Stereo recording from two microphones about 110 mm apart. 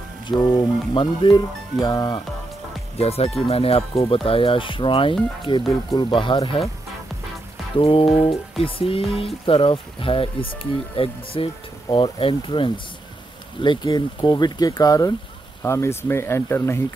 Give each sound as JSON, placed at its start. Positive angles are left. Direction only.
{"t": 0.6, "sound": "speech", "side_deg": 45}
{"t": 3.0, "sound": "speech", "side_deg": 65}
{"t": 7.8, "sound": "speech", "side_deg": 55}
{"t": 13.8, "sound": "speech", "side_deg": 40}